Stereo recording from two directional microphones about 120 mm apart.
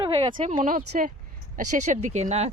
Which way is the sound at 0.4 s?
85° right.